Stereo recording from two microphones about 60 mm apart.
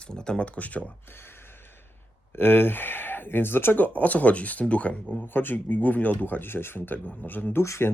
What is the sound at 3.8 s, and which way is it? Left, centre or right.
Speech, left.